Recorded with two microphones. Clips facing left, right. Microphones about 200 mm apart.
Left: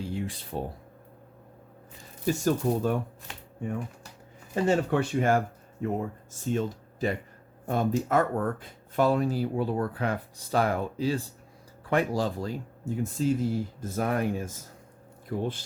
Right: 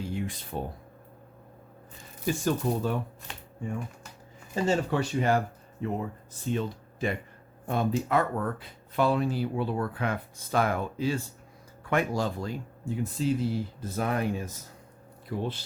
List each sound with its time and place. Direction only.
0.0 s a sound: 30° left (ahead or behind)
2.2 s speech: 40° left (ahead or behind)
4.5 s speech: 55° left (ahead or behind)